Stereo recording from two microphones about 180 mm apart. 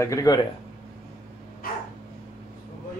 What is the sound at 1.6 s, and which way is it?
Dog, 50° left (ahead or behind).